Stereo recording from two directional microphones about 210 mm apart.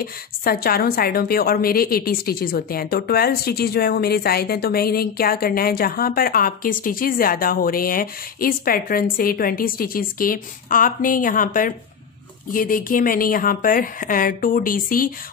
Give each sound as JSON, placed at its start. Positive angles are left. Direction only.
{"t": 0.0, "sound": "a woman's voice", "side_deg": 45}